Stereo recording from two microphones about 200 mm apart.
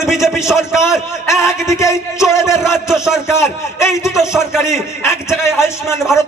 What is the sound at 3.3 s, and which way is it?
A man's voice, 15° left (ahead or behind).